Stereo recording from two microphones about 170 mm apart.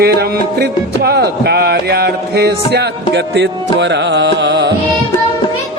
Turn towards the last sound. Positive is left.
turn(degrees=-90)